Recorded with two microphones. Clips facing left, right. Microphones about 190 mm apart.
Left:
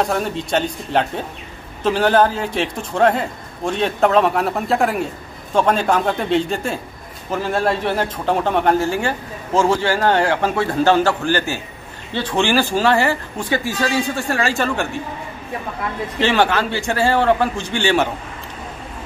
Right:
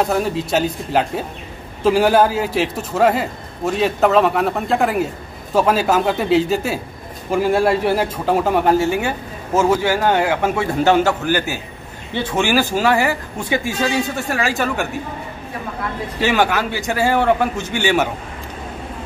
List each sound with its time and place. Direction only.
0.0 s a man's voice: 5° right (ahead or behind)
16.2 s speech: 10° right (ahead or behind)